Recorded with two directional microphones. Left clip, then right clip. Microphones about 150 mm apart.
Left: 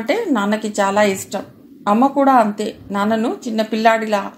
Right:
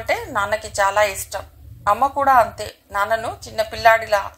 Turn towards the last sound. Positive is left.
turn(degrees=-35)  # may be behind; listen again after turning